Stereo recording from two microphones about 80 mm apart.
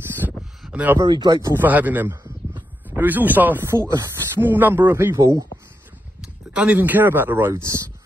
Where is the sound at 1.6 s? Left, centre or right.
Right.